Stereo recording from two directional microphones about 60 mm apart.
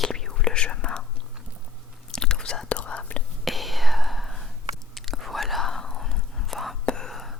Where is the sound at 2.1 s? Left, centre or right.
Centre.